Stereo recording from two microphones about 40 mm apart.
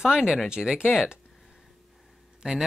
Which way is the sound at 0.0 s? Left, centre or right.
Centre.